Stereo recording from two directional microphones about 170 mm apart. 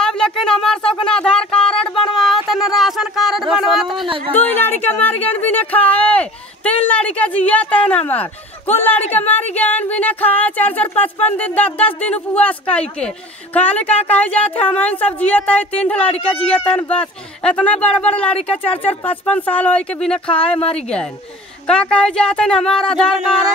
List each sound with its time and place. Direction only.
0.0 s a sound: 5° left (ahead or behind)
4.3 s speech: 10° left (ahead or behind)
16.1 s speech: 30° left (ahead or behind)
16.8 s speech: 5° left (ahead or behind)
20.5 s speech: 35° left (ahead or behind)
21.6 s speech: 5° left (ahead or behind)